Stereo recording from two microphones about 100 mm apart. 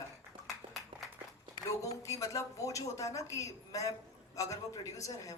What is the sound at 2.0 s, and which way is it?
A woman's voice, 35° left (ahead or behind).